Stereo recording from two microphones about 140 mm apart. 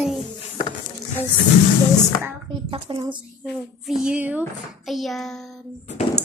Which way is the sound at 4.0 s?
10° right (ahead or behind).